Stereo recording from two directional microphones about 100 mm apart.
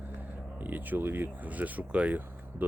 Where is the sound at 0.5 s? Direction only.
15° right (ahead or behind).